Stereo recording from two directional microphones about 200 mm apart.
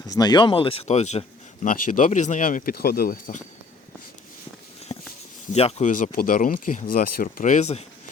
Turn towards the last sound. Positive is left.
turn(degrees=35)  # may be behind; listen again after turning